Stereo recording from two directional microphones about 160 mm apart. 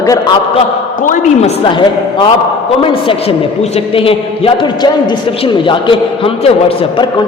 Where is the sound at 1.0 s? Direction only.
55° left (ahead or behind).